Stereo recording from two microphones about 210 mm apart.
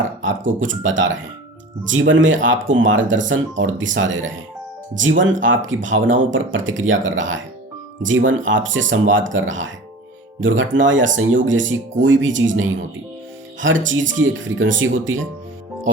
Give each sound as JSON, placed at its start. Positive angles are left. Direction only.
{"t": 0.3, "sound": "speech", "side_deg": -65}